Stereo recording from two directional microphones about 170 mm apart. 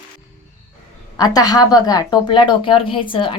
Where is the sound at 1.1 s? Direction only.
20° left (ahead or behind).